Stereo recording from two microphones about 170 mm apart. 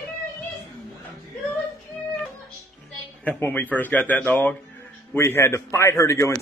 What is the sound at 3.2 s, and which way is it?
Speech, 10° left (ahead or behind).